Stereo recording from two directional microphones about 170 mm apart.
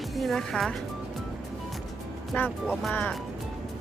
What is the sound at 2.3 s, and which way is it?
Speech, 10° left (ahead or behind).